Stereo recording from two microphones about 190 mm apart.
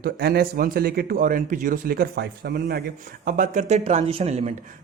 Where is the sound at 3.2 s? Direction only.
45° right (ahead or behind).